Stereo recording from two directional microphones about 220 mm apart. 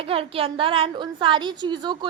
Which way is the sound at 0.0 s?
25° right (ahead or behind).